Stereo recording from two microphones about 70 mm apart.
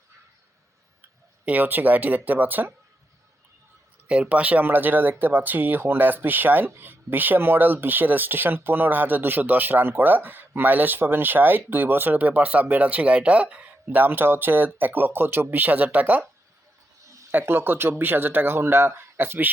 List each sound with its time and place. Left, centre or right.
1.5 s speech: right
4.1 s speech: centre
17.3 s speech: right